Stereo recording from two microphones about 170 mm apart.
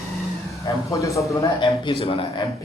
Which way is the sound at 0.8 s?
20° left (ahead or behind).